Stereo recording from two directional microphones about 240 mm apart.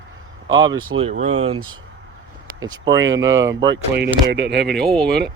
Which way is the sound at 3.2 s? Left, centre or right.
Right.